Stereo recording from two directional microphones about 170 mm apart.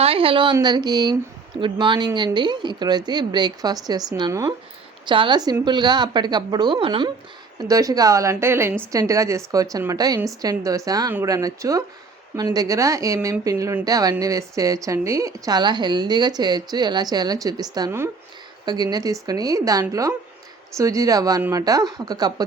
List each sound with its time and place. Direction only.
0.0 s a woman's voice: 35° right (ahead or behind)